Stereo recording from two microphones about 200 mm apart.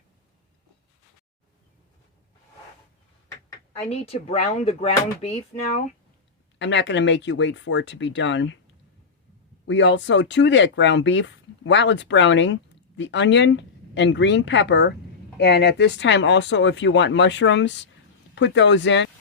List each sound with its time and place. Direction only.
3.8 s speech: 30° left (ahead or behind)
6.6 s speech: 60° left (ahead or behind)
9.6 s speech: 65° left (ahead or behind)